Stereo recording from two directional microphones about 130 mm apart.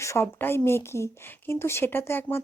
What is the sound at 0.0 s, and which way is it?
A woman's voice, 20° left (ahead or behind).